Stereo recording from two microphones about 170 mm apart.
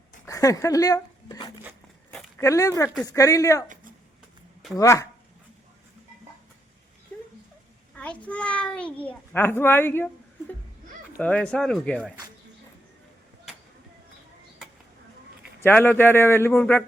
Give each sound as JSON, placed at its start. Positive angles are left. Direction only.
{"t": 0.3, "sound": "speech", "side_deg": 20}
{"t": 2.0, "sound": "a sound", "side_deg": 15}
{"t": 3.1, "sound": "speech", "side_deg": 20}
{"t": 4.8, "sound": "speech", "side_deg": 20}
{"t": 7.9, "sound": "a child's voice", "side_deg": 5}
{"t": 11.2, "sound": "speech", "side_deg": 10}
{"t": 15.6, "sound": "a child's voice", "side_deg": 10}